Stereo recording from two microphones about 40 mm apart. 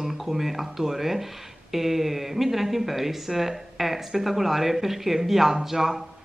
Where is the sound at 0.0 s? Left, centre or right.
Centre.